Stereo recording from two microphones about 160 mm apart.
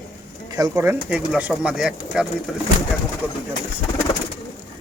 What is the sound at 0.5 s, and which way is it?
Speech, 20° right (ahead or behind).